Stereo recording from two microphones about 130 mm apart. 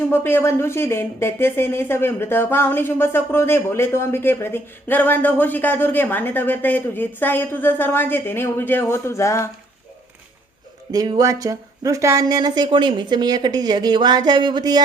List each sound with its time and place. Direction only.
0.1 s speech: 15° left (ahead or behind)
10.9 s speech: 30° right (ahead or behind)